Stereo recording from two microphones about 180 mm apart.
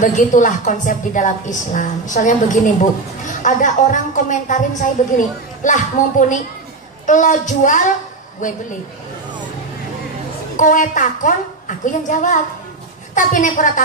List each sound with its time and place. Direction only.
0.0 s a woman's voice: 45° left (ahead or behind)
10.5 s a woman's voice: 45° left (ahead or behind)